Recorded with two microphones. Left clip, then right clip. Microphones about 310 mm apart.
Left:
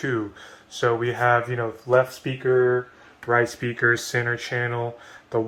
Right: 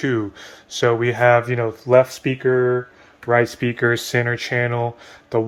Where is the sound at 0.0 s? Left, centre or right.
Right.